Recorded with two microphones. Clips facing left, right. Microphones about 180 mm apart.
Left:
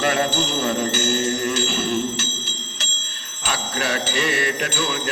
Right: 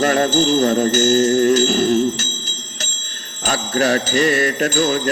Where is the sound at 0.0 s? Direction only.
40° right (ahead or behind).